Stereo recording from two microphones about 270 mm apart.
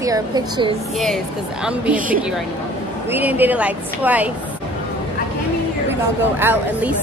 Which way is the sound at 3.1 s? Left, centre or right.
Centre.